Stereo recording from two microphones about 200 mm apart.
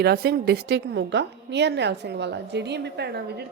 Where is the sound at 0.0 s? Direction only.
50° right (ahead or behind).